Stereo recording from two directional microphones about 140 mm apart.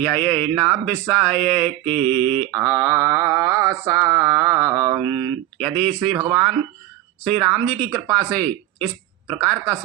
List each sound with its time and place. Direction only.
0.0 s speech: 10° left (ahead or behind)
2.5 s mantra: 25° right (ahead or behind)
5.5 s speech: 5° left (ahead or behind)
7.3 s speech: 5° left (ahead or behind)